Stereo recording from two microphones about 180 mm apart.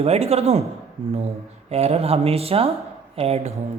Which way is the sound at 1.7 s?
35° right (ahead or behind).